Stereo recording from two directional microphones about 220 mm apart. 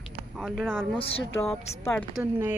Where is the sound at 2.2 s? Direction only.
10° right (ahead or behind).